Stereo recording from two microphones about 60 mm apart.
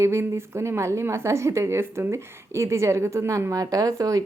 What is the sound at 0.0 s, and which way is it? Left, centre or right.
A woman's voice, right.